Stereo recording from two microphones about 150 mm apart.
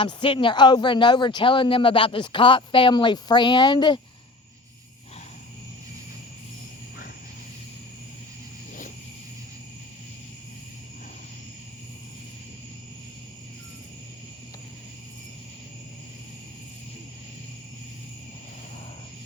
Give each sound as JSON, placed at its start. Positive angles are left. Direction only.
{"t": 0.0, "sound": "speech", "side_deg": 35}